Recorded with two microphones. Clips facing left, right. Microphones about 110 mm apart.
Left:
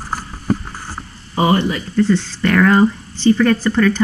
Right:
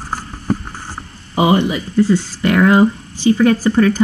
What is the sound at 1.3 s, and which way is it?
Speech, 15° right (ahead or behind).